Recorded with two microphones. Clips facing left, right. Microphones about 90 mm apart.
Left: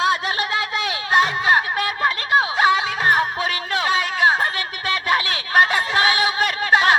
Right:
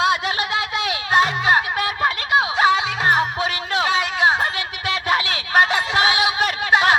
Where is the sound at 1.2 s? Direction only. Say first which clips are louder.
Even; 35° left (ahead or behind).